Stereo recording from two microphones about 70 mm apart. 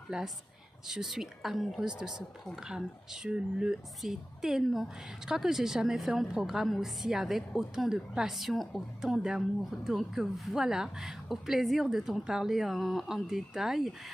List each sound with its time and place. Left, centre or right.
0.1 s a woman's voice: centre